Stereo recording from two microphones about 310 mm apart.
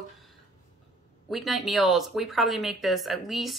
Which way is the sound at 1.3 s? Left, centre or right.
Centre.